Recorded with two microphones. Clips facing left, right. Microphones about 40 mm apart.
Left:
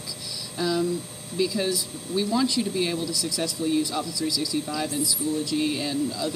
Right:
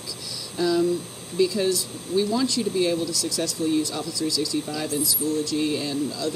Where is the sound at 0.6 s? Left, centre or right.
Centre.